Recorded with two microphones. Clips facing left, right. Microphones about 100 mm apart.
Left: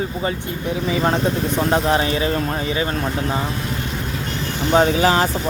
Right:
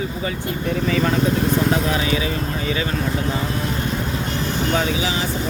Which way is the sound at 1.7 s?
35° left (ahead or behind).